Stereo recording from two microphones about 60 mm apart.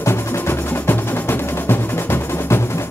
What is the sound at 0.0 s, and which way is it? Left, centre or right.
Music, left.